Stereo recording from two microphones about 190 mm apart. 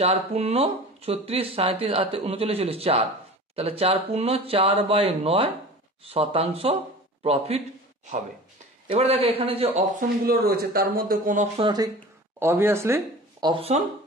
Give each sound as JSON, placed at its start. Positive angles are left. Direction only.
{"t": 0.0, "sound": "speech", "side_deg": -35}
{"t": 8.8, "sound": "speech", "side_deg": -30}
{"t": 10.2, "sound": "a man's voice", "side_deg": -55}
{"t": 11.5, "sound": "speech", "side_deg": -25}
{"t": 12.4, "sound": "speech", "side_deg": -10}
{"t": 13.5, "sound": "speech", "side_deg": -30}